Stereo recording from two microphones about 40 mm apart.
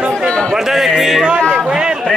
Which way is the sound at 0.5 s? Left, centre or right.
Centre.